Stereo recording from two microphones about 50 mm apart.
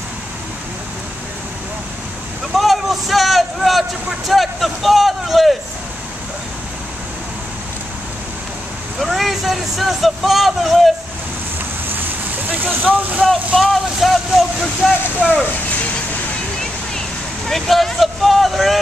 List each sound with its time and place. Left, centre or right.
2.5 s vehicle: centre
4.3 s speech: centre
9.0 s speech: centre
12.4 s speech: right
13.6 s speech: centre
14.8 s speech: centre
17.5 s speech: centre